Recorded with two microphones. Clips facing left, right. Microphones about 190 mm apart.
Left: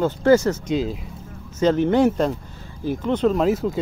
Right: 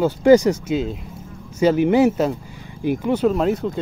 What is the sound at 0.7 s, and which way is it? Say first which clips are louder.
Speech: even; centre (ahead or behind).